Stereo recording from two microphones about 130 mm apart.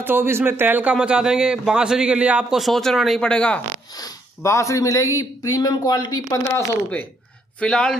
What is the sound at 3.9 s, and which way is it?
Speech, 25° left (ahead or behind).